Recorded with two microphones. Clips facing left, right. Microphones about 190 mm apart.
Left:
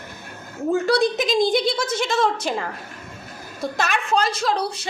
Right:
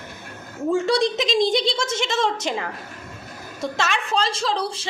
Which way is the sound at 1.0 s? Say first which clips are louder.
Left 1 dB; 25° right (ahead or behind).